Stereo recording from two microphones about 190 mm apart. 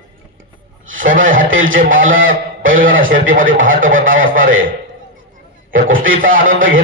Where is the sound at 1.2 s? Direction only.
45° right (ahead or behind).